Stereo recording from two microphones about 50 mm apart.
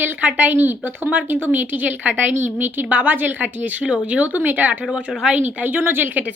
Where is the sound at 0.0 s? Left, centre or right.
Right.